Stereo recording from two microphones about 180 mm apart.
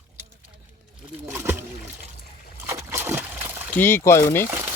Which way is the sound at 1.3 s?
15° right (ahead or behind).